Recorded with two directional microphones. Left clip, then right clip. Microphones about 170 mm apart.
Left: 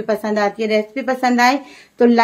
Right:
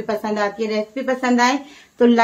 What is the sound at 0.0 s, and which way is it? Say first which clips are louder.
Speech: left 3 dB; 35° left (ahead or behind).